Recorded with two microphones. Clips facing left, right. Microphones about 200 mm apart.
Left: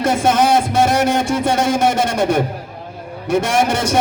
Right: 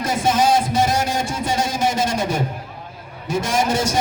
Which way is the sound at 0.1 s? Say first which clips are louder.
Left 2 dB; 55° left (ahead or behind).